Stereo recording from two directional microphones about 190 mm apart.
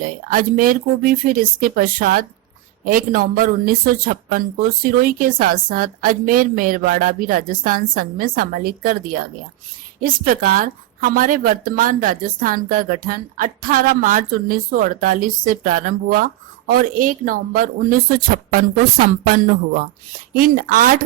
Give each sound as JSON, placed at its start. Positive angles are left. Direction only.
{"t": 0.1, "sound": "a woman's voice", "side_deg": -45}